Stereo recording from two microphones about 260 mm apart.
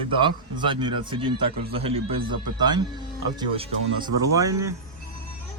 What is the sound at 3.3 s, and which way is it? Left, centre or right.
A man's voice, centre.